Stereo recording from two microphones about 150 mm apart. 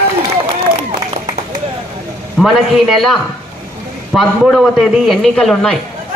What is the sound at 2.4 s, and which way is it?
A man's voice, centre (ahead or behind).